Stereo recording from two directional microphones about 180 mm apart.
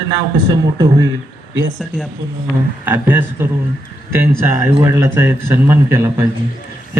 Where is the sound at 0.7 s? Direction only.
20° right (ahead or behind).